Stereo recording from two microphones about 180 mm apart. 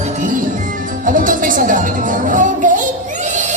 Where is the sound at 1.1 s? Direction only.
50° right (ahead or behind).